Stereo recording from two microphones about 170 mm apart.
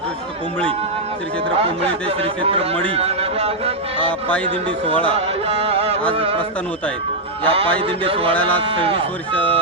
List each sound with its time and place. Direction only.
1.5 s speech: 35° right (ahead or behind)
5.0 s music: 35° right (ahead or behind)
6.1 s speech: 35° right (ahead or behind)
7.4 s speech: 35° right (ahead or behind)
8.3 s speech: 10° left (ahead or behind)
8.6 s speech: 35° right (ahead or behind)